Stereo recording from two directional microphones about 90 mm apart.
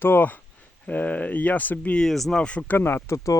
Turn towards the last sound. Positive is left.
turn(degrees=30)  # may be behind; listen again after turning